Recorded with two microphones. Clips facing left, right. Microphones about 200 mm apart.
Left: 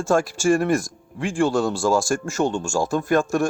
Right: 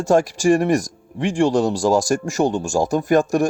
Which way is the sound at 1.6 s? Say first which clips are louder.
Right 3 dB; 40° right (ahead or behind).